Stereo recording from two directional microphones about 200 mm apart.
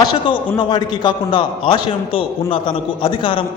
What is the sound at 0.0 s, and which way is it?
A man's voice, 20° left (ahead or behind).